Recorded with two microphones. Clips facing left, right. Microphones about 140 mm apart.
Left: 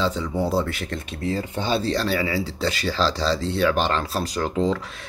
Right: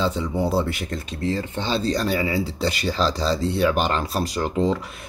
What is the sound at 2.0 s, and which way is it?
Speech, 15° right (ahead or behind).